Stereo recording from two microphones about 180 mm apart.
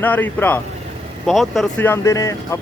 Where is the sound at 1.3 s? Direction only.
Centre (ahead or behind).